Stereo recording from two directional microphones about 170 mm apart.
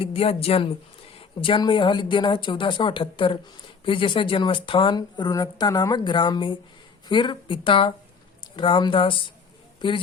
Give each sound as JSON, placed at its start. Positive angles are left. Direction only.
{"t": 0.0, "sound": "speech", "side_deg": 35}